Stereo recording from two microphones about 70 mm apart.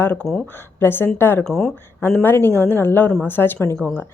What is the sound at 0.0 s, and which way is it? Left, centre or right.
A woman's voice, left.